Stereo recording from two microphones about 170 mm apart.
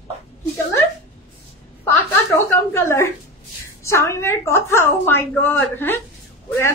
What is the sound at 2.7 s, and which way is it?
A woman's voice, 15° left (ahead or behind).